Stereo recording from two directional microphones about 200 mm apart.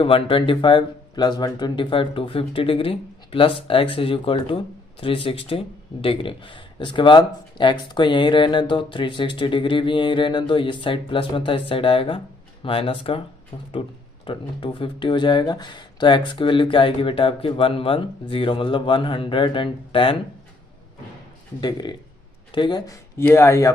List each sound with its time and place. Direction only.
0.0 s speech: 25° left (ahead or behind)
21.6 s speech: 20° left (ahead or behind)